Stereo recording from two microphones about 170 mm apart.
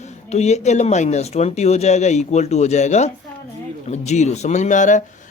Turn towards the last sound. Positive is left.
turn(degrees=45)  # may be behind; listen again after turning